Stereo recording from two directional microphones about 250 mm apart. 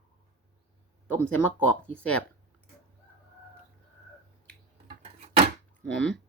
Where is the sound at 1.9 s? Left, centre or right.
Centre.